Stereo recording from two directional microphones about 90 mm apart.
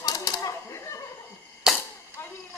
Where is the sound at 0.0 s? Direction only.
45° left (ahead or behind).